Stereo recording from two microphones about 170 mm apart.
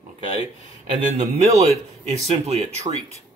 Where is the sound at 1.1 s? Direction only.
40° right (ahead or behind).